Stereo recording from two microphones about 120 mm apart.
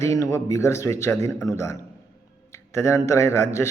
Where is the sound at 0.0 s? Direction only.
25° left (ahead or behind).